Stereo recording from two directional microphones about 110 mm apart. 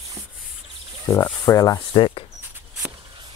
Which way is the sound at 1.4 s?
30° left (ahead or behind).